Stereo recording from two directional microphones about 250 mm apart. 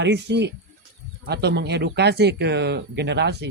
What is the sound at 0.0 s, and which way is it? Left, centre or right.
Speech, right.